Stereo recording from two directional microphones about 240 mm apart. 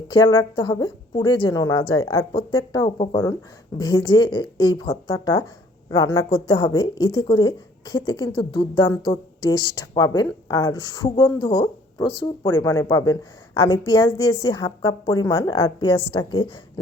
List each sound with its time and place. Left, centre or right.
0.1 s a woman's voice: centre